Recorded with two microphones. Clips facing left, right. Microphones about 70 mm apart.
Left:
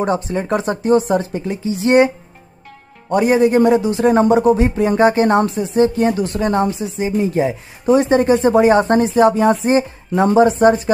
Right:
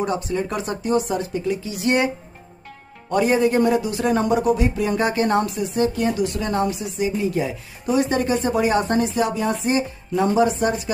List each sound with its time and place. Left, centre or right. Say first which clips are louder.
0.0 s speech: left 4 dB; left
3.1 s speech: left 5 dB; left